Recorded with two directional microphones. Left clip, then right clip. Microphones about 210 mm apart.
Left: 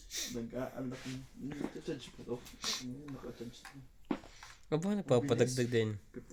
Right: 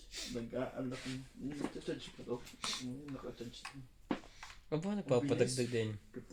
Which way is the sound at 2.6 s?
45° left (ahead or behind).